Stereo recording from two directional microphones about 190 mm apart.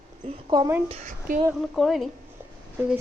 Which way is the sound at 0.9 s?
40° right (ahead or behind).